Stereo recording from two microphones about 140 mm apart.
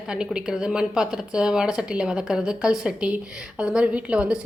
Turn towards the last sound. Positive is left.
turn(degrees=-10)  # may be behind; listen again after turning